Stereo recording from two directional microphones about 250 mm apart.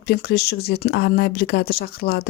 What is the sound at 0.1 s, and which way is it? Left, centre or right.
Speech, left.